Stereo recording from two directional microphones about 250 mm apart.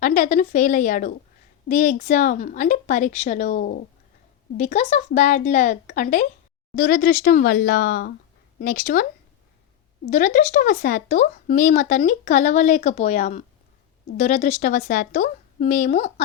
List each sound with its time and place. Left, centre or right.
0.0 s a woman's voice: left
10.1 s speech: left